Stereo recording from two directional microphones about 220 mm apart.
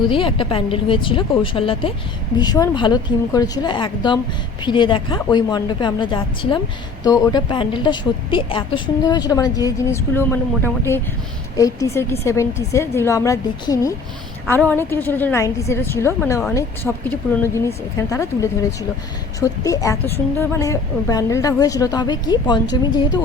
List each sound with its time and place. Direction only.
0.0 s a woman's voice: 25° left (ahead or behind)
11.5 s a woman's voice: 15° left (ahead or behind)